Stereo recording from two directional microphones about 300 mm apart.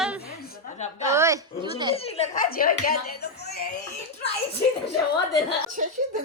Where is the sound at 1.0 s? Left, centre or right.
Centre.